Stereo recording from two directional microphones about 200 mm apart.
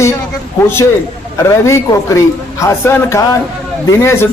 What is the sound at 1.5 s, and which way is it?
A man's voice, 15° left (ahead or behind).